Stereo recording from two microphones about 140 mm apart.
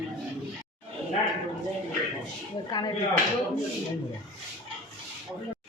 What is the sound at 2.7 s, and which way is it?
Speech, 30° left (ahead or behind).